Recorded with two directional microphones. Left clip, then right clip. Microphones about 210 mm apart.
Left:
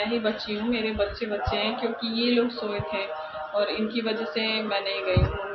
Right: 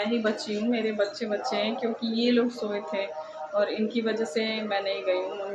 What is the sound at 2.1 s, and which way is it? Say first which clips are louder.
Speech: even; 15° right (ahead or behind).